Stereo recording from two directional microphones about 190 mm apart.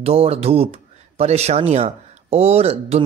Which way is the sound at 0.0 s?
30° right (ahead or behind).